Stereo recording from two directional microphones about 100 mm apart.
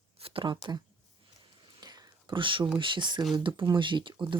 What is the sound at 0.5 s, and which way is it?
Speech, 45° right (ahead or behind).